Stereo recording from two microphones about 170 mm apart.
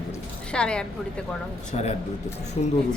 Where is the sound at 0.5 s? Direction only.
5° left (ahead or behind).